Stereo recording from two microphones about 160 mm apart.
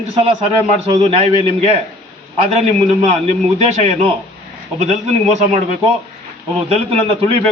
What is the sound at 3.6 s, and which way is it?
Speech, 45° right (ahead or behind).